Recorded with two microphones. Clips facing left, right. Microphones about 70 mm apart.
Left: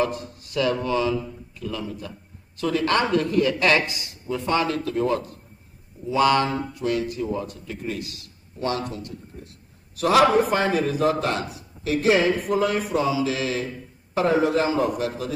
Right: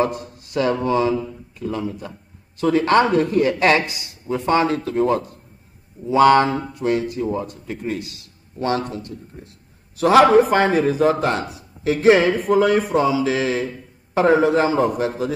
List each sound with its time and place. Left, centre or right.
0.0 s speech: right
10.5 s speech: right